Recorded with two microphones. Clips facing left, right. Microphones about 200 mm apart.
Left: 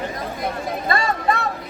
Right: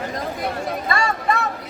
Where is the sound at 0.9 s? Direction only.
35° left (ahead or behind).